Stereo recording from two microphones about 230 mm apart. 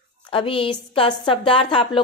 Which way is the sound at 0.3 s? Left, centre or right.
Left.